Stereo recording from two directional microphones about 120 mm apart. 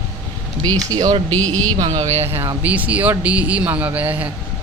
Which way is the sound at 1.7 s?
35° right (ahead or behind).